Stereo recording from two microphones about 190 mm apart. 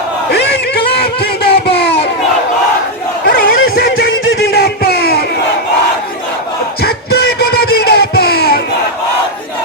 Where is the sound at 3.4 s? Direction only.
50° left (ahead or behind).